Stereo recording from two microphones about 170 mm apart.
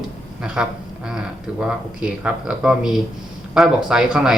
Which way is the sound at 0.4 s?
5° right (ahead or behind).